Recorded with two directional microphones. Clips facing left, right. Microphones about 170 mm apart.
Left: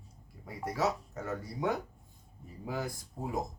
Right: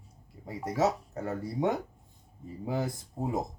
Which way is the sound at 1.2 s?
30° right (ahead or behind).